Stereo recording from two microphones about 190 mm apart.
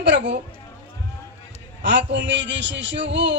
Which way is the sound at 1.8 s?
65° right (ahead or behind).